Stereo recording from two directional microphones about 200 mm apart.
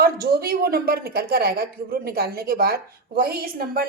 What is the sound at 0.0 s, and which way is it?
A woman's voice, 50° right (ahead or behind).